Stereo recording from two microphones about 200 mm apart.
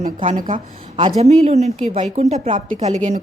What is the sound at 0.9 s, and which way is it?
Speech, 30° right (ahead or behind).